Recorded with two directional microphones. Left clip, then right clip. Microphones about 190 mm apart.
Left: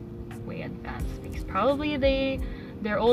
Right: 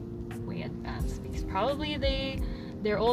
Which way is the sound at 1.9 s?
25° left (ahead or behind).